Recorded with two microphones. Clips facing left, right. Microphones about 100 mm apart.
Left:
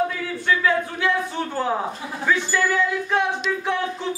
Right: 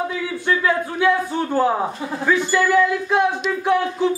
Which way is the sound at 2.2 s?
15° right (ahead or behind).